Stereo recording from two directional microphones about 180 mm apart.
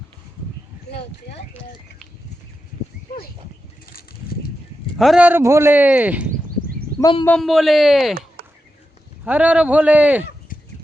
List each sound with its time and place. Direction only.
3.8 s vehicle: 55° left (ahead or behind)
4.9 s speech: centre (ahead or behind)
7.0 s a man's voice: 30° left (ahead or behind)
7.3 s speech: centre (ahead or behind)
8.4 s a sound: 55° right (ahead or behind)
9.2 s speech: 10° right (ahead or behind)